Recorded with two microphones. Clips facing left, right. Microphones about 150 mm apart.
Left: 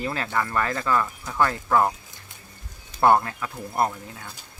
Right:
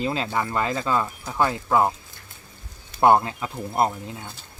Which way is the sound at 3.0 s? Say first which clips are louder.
Right 2 dB; 20° right (ahead or behind).